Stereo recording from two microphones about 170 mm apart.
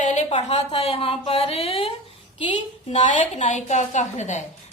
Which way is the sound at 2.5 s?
45° left (ahead or behind).